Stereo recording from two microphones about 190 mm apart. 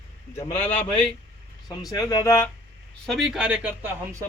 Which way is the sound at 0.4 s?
30° left (ahead or behind).